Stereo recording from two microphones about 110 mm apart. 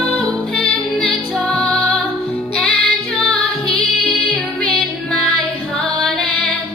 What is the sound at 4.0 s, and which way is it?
Music, 10° left (ahead or behind).